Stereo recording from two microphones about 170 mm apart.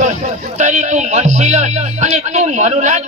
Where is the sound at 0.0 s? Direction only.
45° right (ahead or behind).